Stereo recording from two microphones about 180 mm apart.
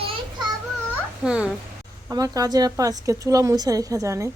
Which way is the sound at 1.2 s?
5° right (ahead or behind).